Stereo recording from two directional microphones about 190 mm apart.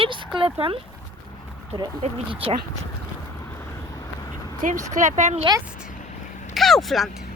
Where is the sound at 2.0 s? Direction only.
30° right (ahead or behind).